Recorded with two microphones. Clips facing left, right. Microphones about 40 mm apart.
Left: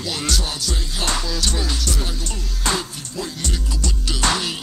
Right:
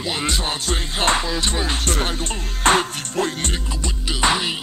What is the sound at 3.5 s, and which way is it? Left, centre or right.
Music, right.